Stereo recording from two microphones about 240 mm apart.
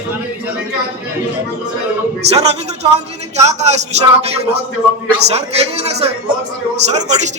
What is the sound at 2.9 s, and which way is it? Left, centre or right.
Speech, right.